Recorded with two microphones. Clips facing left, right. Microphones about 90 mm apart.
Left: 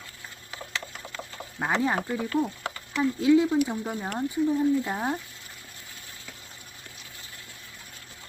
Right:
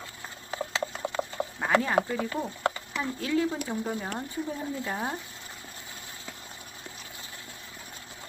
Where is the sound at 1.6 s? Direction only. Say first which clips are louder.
Even; 20° left (ahead or behind).